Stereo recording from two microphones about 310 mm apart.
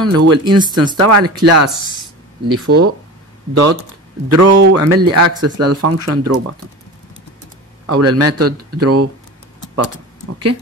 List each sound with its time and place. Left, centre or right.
0.0 s speech: right
0.5 s speech: centre
0.9 s speech: right
4.3 s speech: right
7.8 s speech: right